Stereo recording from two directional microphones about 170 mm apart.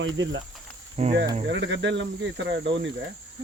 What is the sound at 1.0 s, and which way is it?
Speech, 40° right (ahead or behind).